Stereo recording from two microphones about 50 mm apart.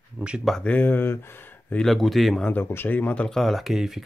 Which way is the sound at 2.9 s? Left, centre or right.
Left.